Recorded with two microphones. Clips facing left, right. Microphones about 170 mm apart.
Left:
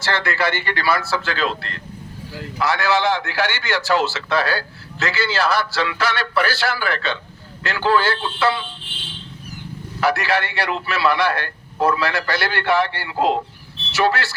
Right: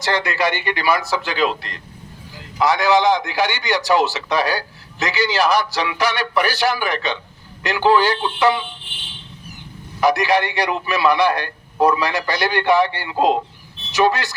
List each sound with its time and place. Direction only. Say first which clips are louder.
0.0 s a man's voice: right 2 dB; 15° right (ahead or behind)
10.0 s a man's voice: right 3 dB; 15° right (ahead or behind)